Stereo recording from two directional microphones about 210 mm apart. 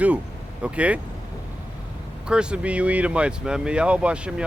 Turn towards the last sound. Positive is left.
turn(degrees=-5)  # may be behind; listen again after turning